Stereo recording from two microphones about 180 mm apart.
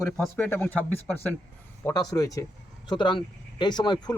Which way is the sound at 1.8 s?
20° left (ahead or behind).